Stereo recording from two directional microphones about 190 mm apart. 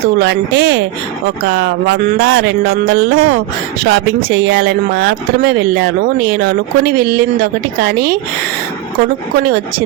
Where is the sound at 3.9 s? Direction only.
60° right (ahead or behind).